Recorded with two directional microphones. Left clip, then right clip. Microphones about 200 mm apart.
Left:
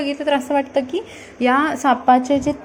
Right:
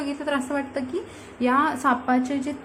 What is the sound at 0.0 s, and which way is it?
A woman's voice, 15° left (ahead or behind).